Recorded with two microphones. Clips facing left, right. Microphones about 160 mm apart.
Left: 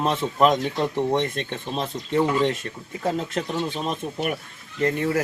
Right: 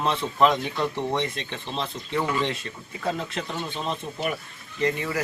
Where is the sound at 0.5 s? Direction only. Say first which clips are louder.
Left 3 dB; 20° left (ahead or behind).